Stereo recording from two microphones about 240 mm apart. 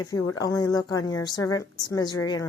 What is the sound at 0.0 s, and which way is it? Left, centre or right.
A woman's voice, centre.